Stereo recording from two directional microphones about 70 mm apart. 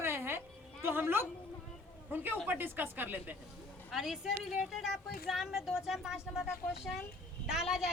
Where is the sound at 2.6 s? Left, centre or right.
Right.